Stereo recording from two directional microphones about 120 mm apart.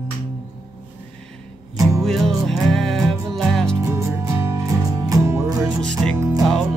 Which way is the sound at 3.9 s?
25° right (ahead or behind).